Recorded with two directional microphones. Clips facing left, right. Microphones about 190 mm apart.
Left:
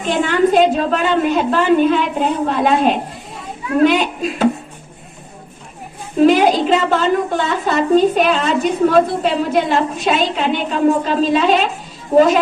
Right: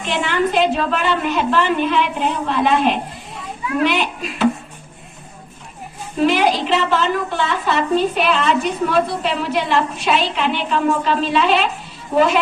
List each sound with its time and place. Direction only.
0.1 s a woman's voice: 45° left (ahead or behind)
6.1 s a woman's voice: 45° left (ahead or behind)